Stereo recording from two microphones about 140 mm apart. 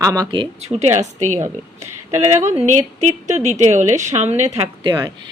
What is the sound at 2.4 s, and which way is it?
A woman's voice, 60° right (ahead or behind).